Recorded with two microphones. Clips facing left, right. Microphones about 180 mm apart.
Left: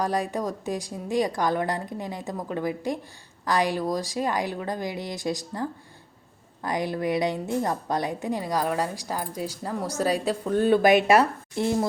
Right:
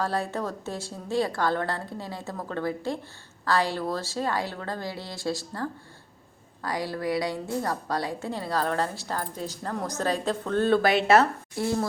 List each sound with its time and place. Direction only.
0.0 s a woman's voice: 15° left (ahead or behind)